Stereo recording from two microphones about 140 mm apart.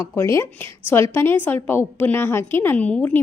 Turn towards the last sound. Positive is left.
turn(degrees=10)  # may be behind; listen again after turning